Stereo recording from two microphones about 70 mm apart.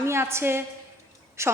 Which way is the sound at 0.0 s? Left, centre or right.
Right.